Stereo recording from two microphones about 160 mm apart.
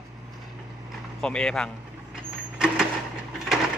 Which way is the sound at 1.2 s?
5° left (ahead or behind).